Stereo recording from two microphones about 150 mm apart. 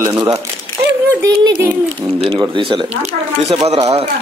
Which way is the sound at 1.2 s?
30° right (ahead or behind).